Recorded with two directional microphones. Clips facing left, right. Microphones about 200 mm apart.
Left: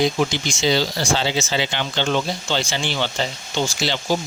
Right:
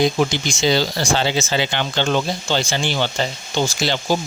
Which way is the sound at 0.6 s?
50° right (ahead or behind).